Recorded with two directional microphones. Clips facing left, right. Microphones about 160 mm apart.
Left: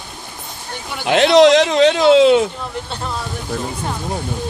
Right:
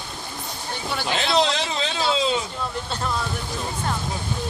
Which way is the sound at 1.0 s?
75° left (ahead or behind).